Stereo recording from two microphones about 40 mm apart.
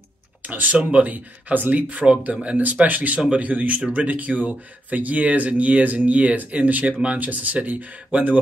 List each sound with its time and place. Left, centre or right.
0.4 s speech: right
1.1 s speech: right